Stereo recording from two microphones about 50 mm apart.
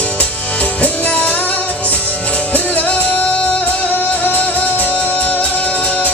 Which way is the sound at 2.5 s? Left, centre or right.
Left.